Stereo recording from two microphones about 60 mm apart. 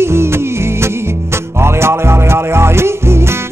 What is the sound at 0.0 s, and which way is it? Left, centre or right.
Music, right.